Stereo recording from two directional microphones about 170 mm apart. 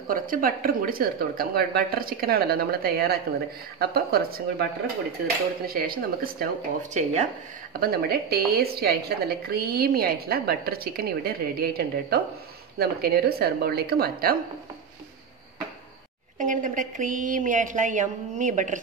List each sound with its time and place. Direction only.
0.1 s speech: 55° right (ahead or behind)
6.9 s speech: 40° right (ahead or behind)
7.8 s speech: 65° right (ahead or behind)
16.3 s speech: 50° right (ahead or behind)